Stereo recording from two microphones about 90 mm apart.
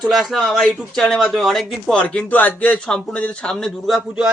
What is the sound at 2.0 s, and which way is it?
Speech, 15° left (ahead or behind).